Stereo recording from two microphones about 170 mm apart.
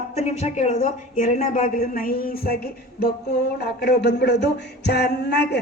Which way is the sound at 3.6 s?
70° left (ahead or behind).